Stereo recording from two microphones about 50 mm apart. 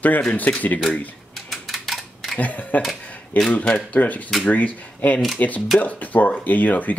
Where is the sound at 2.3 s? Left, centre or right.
Left.